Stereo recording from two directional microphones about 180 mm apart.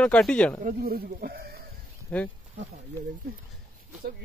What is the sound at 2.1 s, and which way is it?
Speech, 10° left (ahead or behind).